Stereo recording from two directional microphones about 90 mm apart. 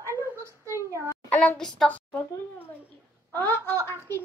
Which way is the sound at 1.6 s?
5° left (ahead or behind).